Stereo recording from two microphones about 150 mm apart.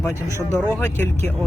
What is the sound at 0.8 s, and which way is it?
Speech, 15° left (ahead or behind).